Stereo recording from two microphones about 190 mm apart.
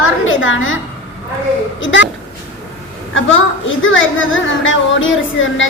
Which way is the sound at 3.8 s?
90° left.